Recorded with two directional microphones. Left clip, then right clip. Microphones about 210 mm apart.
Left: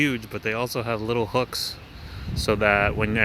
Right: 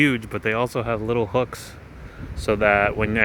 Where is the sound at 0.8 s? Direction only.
5° right (ahead or behind).